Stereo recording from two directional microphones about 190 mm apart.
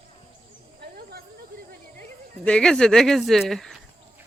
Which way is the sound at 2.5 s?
5° left (ahead or behind).